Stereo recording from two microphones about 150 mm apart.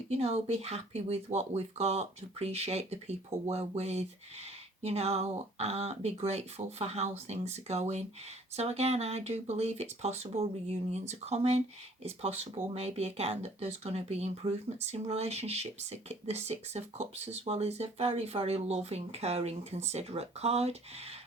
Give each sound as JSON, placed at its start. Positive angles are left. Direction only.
{"t": 0.1, "sound": "speech", "side_deg": -45}